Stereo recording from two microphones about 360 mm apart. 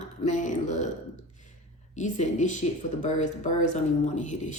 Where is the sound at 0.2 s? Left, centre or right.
Centre.